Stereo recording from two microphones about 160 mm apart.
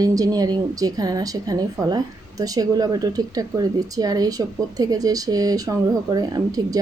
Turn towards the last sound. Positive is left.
turn(degrees=-25)  # may be behind; listen again after turning